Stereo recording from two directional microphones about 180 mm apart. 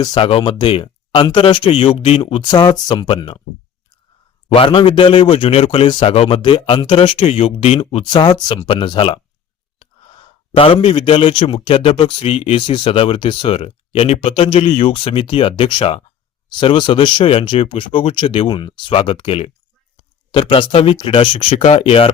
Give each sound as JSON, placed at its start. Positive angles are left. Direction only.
{"t": 0.0, "sound": "speech", "side_deg": 25}
{"t": 4.4, "sound": "speech", "side_deg": 30}